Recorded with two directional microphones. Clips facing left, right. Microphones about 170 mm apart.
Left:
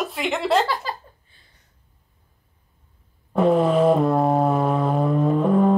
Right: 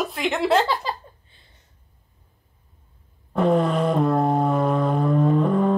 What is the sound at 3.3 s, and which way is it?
Vehicle, centre (ahead or behind).